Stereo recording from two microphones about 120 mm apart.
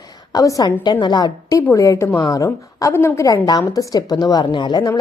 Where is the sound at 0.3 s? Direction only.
30° left (ahead or behind).